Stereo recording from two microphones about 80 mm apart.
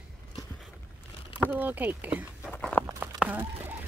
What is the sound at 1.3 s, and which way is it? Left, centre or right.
Speech, right.